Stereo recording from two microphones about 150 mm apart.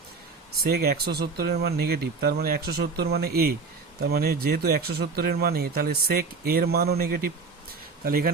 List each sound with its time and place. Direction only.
0.6 s speech: 90° right
8.0 s speech: 80° right